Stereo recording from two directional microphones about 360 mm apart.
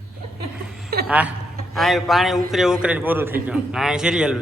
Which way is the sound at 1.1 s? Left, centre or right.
Centre.